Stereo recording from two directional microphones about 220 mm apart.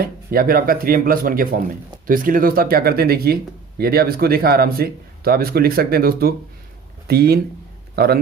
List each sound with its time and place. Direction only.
0.0 s speech: 40° right (ahead or behind)